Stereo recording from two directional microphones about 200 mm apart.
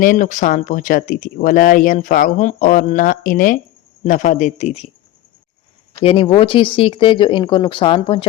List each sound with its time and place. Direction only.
0.0 s speech: 40° left (ahead or behind)
6.0 s speech: 30° left (ahead or behind)